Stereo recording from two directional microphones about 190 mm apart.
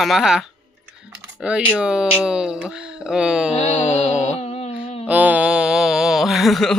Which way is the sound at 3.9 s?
30° left (ahead or behind).